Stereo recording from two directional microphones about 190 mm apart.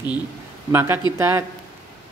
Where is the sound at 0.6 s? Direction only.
10° right (ahead or behind).